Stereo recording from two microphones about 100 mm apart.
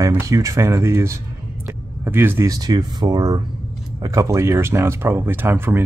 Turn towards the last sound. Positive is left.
turn(degrees=-25)  # may be behind; listen again after turning